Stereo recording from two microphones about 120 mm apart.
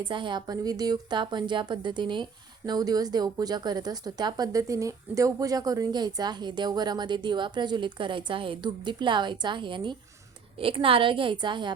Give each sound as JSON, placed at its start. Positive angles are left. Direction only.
{"t": 0.0, "sound": "a woman's voice", "side_deg": -40}